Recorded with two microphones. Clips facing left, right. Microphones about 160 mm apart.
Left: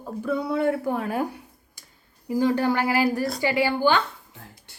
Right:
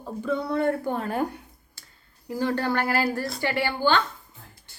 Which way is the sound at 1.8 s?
15° left (ahead or behind).